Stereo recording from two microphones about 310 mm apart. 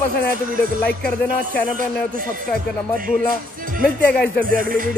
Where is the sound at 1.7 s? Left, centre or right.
Right.